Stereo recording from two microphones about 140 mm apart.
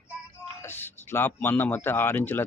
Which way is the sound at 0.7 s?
15° left (ahead or behind).